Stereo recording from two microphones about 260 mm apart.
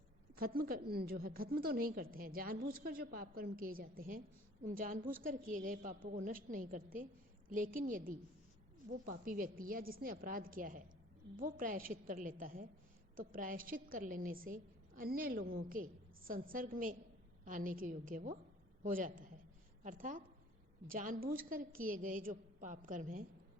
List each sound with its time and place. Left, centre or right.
0.3 s a woman's voice: right